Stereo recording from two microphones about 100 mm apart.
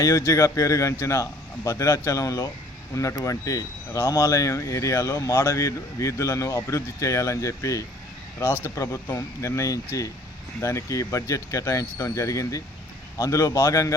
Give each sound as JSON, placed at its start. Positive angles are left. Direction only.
{"t": 0.0, "sound": "speech", "side_deg": 30}